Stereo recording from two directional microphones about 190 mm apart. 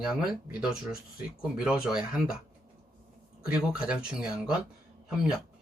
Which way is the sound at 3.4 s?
5° right (ahead or behind).